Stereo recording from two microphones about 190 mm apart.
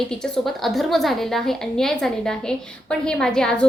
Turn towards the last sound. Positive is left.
turn(degrees=5)  # may be behind; listen again after turning